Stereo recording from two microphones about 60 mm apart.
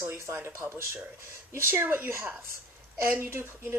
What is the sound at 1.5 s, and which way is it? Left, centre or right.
A woman's voice, right.